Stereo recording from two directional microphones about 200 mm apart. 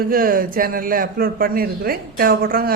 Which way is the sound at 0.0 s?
45° right (ahead or behind).